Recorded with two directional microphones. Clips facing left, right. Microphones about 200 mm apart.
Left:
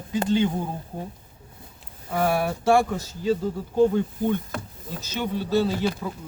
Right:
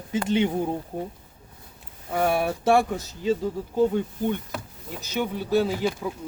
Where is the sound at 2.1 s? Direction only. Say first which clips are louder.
Even; 20° right (ahead or behind).